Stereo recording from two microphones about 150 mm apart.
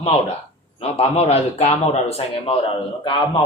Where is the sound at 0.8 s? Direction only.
45° left (ahead or behind).